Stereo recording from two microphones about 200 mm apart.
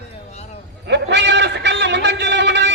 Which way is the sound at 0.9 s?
60° right (ahead or behind).